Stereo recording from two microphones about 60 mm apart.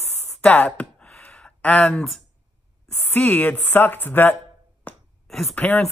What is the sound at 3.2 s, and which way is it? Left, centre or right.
Speech, left.